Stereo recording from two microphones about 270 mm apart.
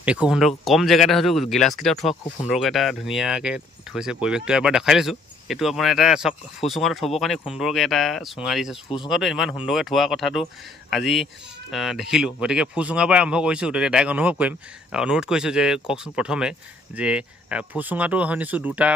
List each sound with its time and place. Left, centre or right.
0.0 s speech: centre
8.8 s speech: centre
9.1 s speech: centre